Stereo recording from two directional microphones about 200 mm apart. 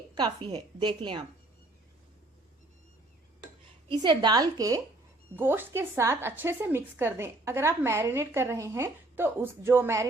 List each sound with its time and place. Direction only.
0.1 s a woman's voice: 20° right (ahead or behind)
3.8 s a woman's voice: 25° right (ahead or behind)